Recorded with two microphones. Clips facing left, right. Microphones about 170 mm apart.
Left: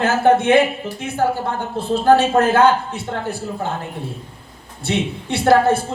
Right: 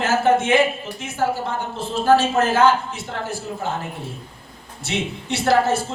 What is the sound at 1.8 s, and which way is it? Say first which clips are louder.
Speech: left 3 dB; 55° left (ahead or behind).